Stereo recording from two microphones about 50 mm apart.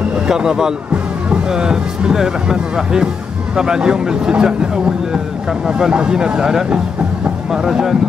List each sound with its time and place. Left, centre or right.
0.3 s speech: centre